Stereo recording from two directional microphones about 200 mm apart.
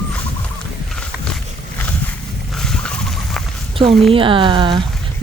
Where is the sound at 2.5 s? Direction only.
Centre (ahead or behind).